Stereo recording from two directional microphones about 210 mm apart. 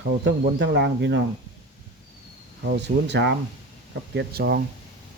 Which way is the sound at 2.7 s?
55° right (ahead or behind).